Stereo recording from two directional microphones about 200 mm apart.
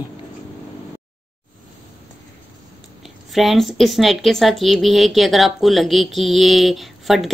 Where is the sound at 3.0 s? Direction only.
Centre (ahead or behind).